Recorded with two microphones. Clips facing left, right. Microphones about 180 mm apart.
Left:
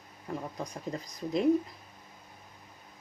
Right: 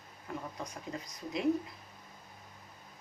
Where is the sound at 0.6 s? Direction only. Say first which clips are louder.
Left 4 dB; 35° left (ahead or behind).